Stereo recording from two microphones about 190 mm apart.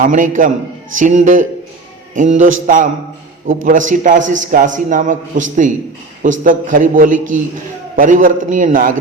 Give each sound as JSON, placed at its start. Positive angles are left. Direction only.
{"t": 0.0, "sound": "a man's voice", "side_deg": -45}